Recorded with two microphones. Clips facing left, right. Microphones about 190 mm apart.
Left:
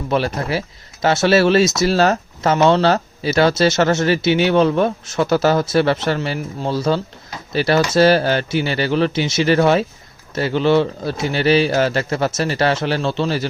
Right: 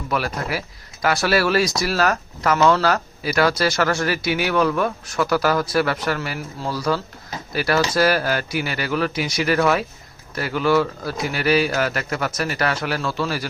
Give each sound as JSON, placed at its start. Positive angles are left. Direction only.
{"t": 0.1, "sound": "speech", "side_deg": 25}